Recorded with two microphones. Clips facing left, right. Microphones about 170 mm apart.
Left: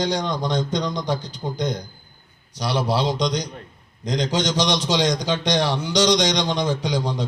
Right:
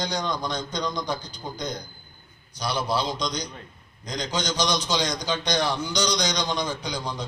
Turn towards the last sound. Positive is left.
turn(degrees=90)